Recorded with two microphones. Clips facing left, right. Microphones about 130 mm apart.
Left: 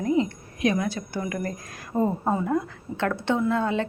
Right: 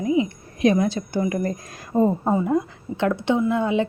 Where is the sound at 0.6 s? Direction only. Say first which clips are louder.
Right 5 dB; 30° right (ahead or behind).